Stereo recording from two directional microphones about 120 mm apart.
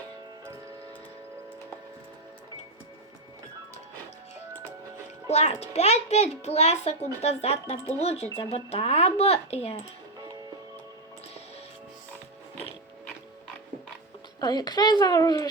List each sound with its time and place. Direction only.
5.3 s a child's voice: 65° left (ahead or behind)
14.4 s speech: 35° left (ahead or behind)